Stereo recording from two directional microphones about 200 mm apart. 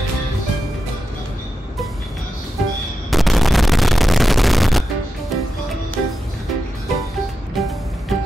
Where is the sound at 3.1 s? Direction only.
Centre (ahead or behind).